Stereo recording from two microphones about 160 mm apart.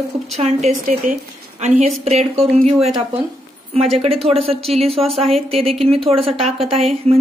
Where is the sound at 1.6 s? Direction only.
45° right (ahead or behind).